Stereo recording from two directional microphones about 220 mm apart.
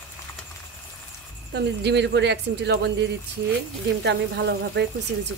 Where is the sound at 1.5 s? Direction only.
50° right (ahead or behind).